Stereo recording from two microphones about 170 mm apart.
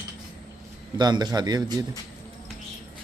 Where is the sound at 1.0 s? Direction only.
25° right (ahead or behind).